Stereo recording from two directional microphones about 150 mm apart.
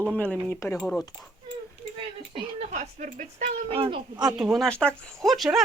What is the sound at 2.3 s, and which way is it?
Speech, 50° right (ahead or behind).